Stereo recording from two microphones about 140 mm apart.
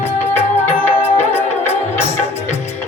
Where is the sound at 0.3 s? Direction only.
15° left (ahead or behind).